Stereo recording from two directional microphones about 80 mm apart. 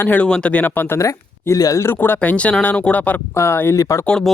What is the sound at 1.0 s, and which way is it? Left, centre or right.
Speech, left.